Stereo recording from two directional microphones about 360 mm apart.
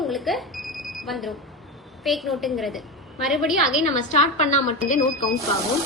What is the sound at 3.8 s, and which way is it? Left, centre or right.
Speech, centre.